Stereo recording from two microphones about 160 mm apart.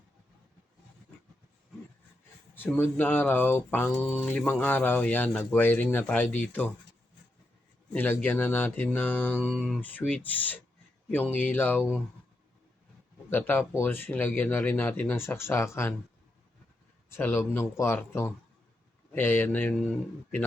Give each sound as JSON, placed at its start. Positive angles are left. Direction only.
{"t": 2.6, "sound": "speech", "side_deg": 15}
{"t": 7.9, "sound": "speech", "side_deg": 10}
{"t": 9.4, "sound": "mantra", "side_deg": 0}
{"t": 9.8, "sound": "speech", "side_deg": 10}
{"t": 13.3, "sound": "speech", "side_deg": 15}
{"t": 17.1, "sound": "speech", "side_deg": 15}